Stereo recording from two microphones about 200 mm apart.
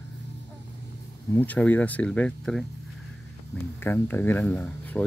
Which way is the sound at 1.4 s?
10° left (ahead or behind).